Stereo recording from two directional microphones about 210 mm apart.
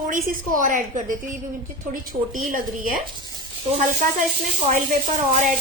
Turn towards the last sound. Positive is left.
turn(degrees=-40)  # may be behind; listen again after turning